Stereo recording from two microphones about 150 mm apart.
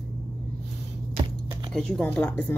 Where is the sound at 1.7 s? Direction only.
5° left (ahead or behind).